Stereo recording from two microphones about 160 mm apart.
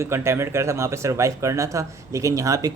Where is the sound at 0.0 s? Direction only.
15° right (ahead or behind).